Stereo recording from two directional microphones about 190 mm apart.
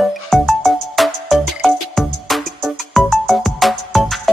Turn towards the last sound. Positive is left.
turn(degrees=0)  # may be behind; listen again after turning